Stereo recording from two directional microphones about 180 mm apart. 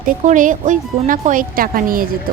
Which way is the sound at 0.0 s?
45° right (ahead or behind).